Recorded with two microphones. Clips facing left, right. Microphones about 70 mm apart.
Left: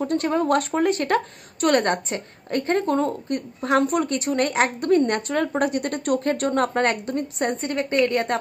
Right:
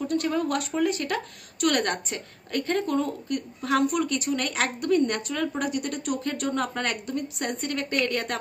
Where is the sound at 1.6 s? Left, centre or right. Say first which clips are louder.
Left 5 dB; left.